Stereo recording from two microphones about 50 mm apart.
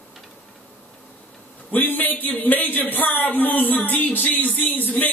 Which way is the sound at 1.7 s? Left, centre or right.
Left.